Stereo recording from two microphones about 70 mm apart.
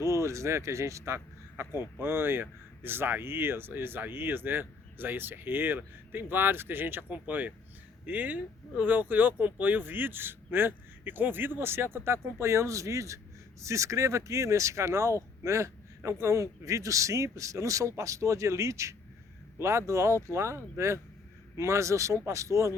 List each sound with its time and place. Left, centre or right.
0.0 s speech: right